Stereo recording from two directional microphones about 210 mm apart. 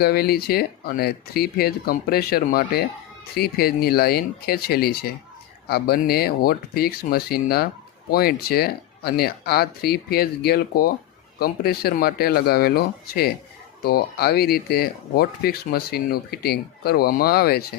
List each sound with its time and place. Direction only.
0.0 s speech: 45° left (ahead or behind)